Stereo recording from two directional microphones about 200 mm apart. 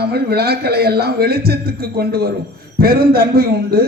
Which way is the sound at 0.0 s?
50° right (ahead or behind).